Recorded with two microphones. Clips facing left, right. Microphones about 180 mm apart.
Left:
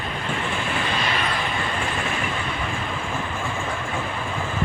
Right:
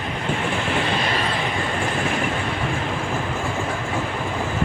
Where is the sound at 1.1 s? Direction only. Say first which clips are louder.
Right 2 dB; 35° right (ahead or behind).